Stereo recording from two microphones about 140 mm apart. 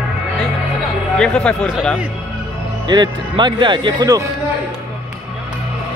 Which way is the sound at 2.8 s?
35° right (ahead or behind).